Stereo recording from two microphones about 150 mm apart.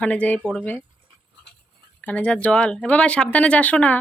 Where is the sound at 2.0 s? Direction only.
10° left (ahead or behind).